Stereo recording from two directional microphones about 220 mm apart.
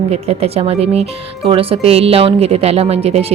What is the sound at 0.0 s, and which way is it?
Speech, 25° right (ahead or behind).